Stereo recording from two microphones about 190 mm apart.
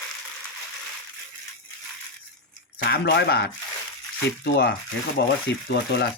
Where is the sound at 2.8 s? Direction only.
60° left (ahead or behind).